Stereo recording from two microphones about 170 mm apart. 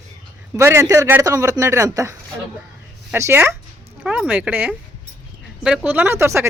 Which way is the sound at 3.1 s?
15° right (ahead or behind).